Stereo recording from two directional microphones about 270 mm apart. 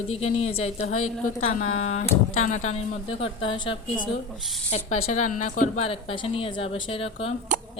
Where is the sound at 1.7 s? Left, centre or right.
Left.